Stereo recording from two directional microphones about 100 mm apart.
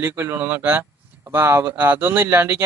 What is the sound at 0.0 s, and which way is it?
Speech, 25° right (ahead or behind).